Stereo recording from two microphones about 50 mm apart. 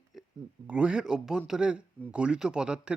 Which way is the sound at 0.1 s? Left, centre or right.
Centre.